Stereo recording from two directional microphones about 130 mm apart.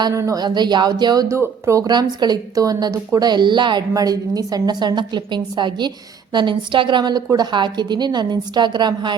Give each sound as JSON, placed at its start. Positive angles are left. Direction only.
{"t": 0.0, "sound": "speech", "side_deg": -25}